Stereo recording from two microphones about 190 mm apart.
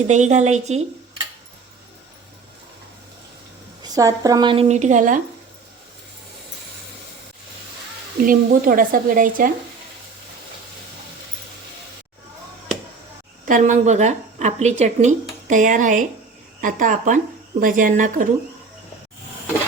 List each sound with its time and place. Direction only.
0.1 s a woman's voice: 40° right (ahead or behind)
3.8 s a woman's voice: 20° right (ahead or behind)
4.7 s a woman's voice: 40° right (ahead or behind)
8.2 s speech: 45° right (ahead or behind)
13.4 s a woman's voice: 40° right (ahead or behind)